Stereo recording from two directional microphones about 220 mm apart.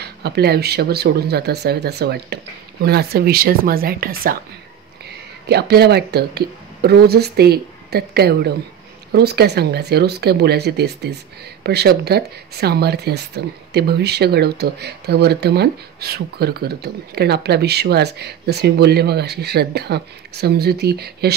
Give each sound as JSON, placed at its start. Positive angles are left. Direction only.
{"t": 0.0, "sound": "speech", "side_deg": -50}
{"t": 5.5, "sound": "speech", "side_deg": -50}